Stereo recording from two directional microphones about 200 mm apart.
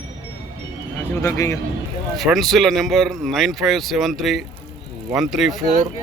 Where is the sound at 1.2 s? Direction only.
15° left (ahead or behind).